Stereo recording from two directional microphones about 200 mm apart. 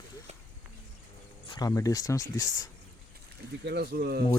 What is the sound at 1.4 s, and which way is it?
Speech, 20° left (ahead or behind).